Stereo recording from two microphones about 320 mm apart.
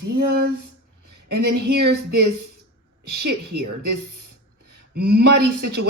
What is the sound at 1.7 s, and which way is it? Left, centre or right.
Speech, right.